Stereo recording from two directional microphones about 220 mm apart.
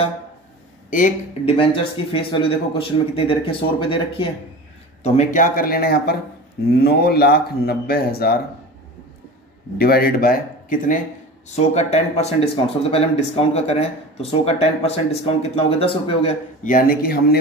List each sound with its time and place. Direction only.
0.8 s speech: 35° left (ahead or behind)
9.8 s speech: 45° left (ahead or behind)